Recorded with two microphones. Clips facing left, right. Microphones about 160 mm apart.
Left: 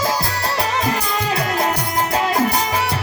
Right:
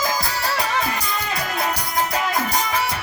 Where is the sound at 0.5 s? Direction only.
30° left (ahead or behind).